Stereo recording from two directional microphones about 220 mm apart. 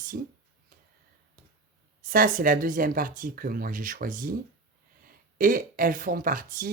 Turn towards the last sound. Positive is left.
turn(degrees=-40)  # may be behind; listen again after turning